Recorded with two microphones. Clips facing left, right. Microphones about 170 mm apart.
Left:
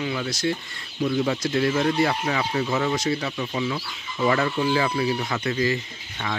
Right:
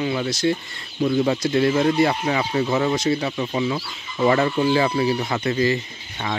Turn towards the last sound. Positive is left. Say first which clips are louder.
# right 3 dB
turn(degrees=-30)  # may be behind; listen again after turning